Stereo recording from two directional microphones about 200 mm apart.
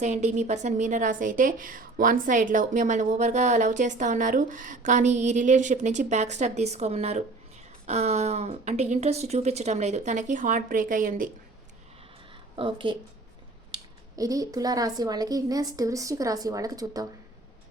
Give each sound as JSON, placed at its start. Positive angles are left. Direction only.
{"t": 0.0, "sound": "a woman's voice", "side_deg": -35}
{"t": 12.5, "sound": "speech", "side_deg": -25}
{"t": 14.2, "sound": "a woman's voice", "side_deg": -15}